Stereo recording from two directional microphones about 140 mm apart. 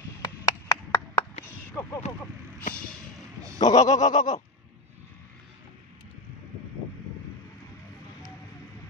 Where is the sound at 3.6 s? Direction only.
25° left (ahead or behind).